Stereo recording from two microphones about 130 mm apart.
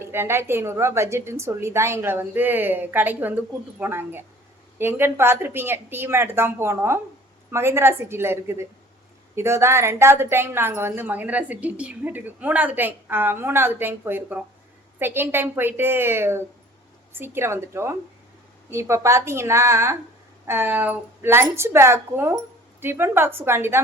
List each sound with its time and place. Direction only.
0.0 s a woman's voice: 20° right (ahead or behind)